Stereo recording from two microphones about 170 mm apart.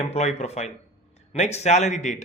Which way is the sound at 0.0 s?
40° left (ahead or behind).